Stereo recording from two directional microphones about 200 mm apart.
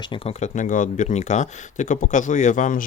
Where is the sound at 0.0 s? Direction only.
25° left (ahead or behind).